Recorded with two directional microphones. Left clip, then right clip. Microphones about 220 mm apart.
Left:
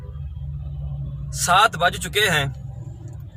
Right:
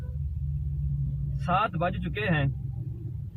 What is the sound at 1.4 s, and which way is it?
A man's voice, 25° left (ahead or behind).